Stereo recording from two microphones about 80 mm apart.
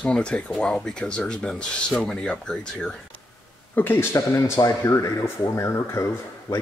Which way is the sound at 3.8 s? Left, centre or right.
Left.